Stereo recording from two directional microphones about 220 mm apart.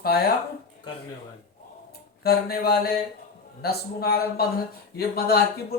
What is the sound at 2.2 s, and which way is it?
Speech, 45° left (ahead or behind).